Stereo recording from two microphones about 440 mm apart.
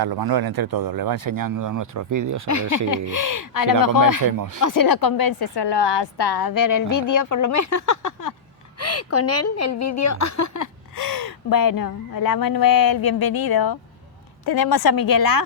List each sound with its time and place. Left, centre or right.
0.0 s speech: right
2.5 s a woman's voice: left
4.3 s speech: right
4.6 s a woman's voice: left
8.8 s a woman's voice: left